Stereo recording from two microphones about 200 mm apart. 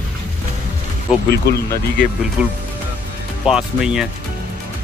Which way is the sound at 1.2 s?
50° left (ahead or behind).